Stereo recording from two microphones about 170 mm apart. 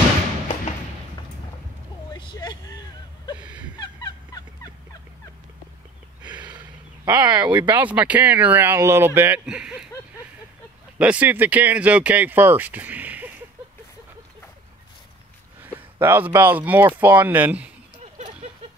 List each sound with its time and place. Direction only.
2.1 s vehicle: 25° left (ahead or behind)
3.3 s a sound: 10° right (ahead or behind)
3.8 s fowl: 25° left (ahead or behind)
7.1 s speech: 10° right (ahead or behind)
11.0 s speech: 10° right (ahead or behind)
15.6 s speech: 10° right (ahead or behind)
17.9 s a sound: 40° right (ahead or behind)